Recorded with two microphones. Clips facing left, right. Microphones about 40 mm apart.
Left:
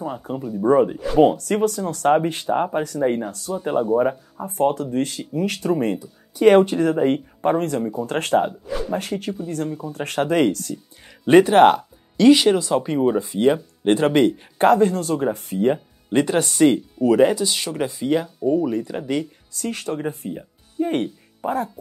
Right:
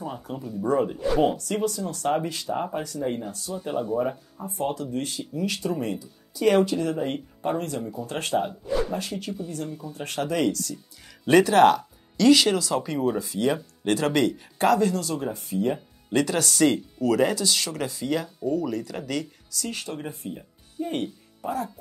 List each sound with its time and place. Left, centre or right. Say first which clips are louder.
0.6 s speech: left 7 dB; left
1.2 s speech: left 11 dB; left
3.9 s speech: left 7 dB; left
4.5 s speech: left 8 dB; left
11.2 s speech: left 5 dB; left
19.5 s speech: left 6 dB; left